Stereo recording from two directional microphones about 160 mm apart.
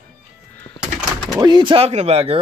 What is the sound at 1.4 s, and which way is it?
Speech, 30° right (ahead or behind).